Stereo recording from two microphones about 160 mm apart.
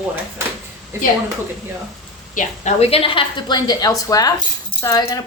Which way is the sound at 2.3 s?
50° left (ahead or behind).